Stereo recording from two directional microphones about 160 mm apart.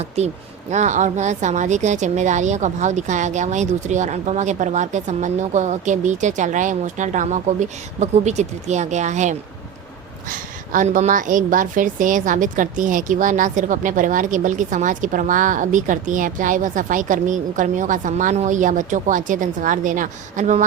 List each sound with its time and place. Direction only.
0.2 s a woman's voice: 40° right (ahead or behind)